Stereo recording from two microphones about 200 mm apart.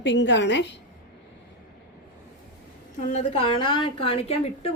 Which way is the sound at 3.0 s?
30° left (ahead or behind).